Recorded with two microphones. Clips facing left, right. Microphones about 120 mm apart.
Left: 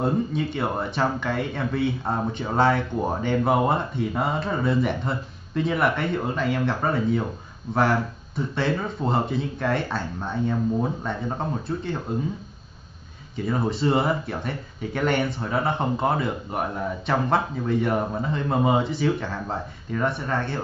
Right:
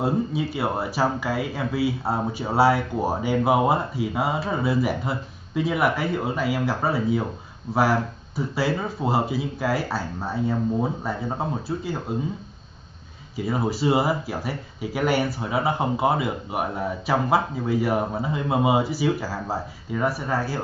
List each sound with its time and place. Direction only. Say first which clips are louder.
0.0 s speech: even; 5° right (ahead or behind)
13.4 s speech: even; 5° right (ahead or behind)